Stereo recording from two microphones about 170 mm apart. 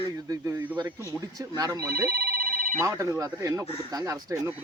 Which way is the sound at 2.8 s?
20° right (ahead or behind).